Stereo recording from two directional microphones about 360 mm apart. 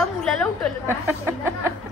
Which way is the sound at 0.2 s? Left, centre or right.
Centre.